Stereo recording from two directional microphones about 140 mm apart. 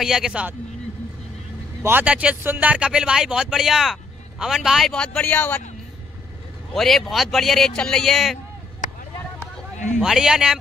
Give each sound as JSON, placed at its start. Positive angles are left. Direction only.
{"t": 0.0, "sound": "a man's voice", "side_deg": -5}
{"t": 1.8, "sound": "a man's voice", "side_deg": -15}
{"t": 6.7, "sound": "a man's voice", "side_deg": 0}
{"t": 9.9, "sound": "a man's voice", "side_deg": -5}